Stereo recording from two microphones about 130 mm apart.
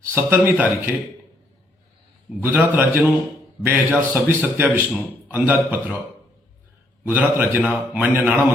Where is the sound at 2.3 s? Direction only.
15° right (ahead or behind).